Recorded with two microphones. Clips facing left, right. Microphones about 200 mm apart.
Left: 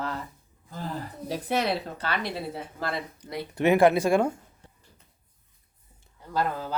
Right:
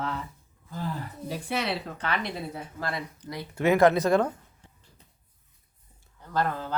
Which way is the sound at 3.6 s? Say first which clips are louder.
Left 1 dB; 15° left (ahead or behind).